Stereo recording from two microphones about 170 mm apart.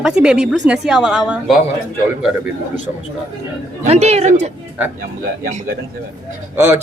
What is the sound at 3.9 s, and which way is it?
Speech, 40° right (ahead or behind).